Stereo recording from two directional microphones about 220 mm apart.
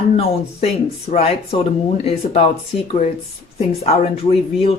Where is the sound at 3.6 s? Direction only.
30° left (ahead or behind).